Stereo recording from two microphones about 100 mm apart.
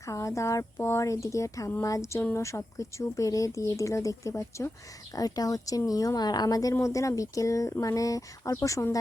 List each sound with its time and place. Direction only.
0.0 s speech: 30° left (ahead or behind)